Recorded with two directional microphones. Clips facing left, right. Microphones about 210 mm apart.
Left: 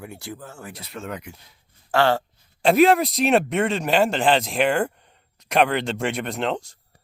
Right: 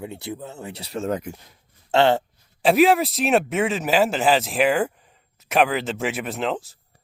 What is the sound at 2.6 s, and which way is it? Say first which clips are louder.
Speech: even; centre (ahead or behind).